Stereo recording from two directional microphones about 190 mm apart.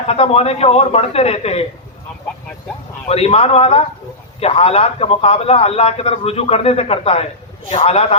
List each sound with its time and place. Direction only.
0.1 s a man's voice: 30° left (ahead or behind)
3.1 s a man's voice: 35° left (ahead or behind)